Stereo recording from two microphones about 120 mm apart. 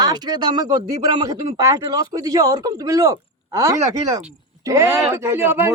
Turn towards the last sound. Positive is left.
turn(degrees=-20)  # may be behind; listen again after turning